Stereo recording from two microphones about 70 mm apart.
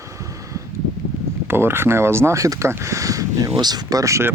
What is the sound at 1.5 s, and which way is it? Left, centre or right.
Speech, right.